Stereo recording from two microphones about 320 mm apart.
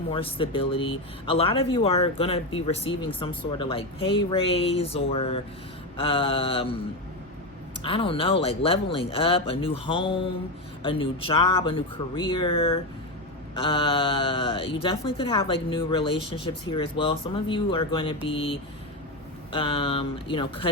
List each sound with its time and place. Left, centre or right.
0.1 s speech: centre
7.9 s speech: centre